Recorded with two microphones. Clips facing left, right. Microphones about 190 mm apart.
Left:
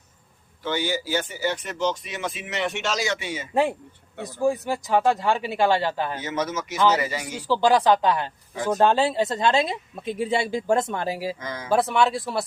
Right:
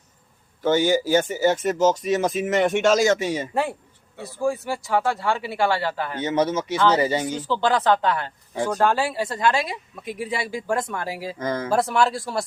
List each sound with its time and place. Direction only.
0.6 s speech: 45° right (ahead or behind)
3.5 s speech: 15° left (ahead or behind)
6.1 s speech: 30° right (ahead or behind)
7.3 s speech: 10° left (ahead or behind)
11.3 s speech: 50° right (ahead or behind)
11.7 s speech: centre (ahead or behind)